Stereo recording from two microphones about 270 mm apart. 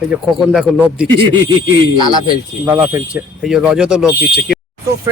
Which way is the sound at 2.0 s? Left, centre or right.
Centre.